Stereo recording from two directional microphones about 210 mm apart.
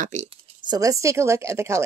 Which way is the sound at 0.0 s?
35° right (ahead or behind).